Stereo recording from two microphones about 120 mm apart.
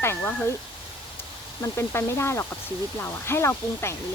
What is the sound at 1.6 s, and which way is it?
Speech, 20° left (ahead or behind).